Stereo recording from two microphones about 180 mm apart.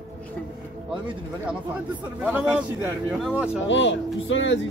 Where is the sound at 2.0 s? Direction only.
10° right (ahead or behind).